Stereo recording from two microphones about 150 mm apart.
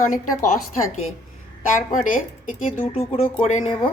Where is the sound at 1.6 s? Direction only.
60° left (ahead or behind).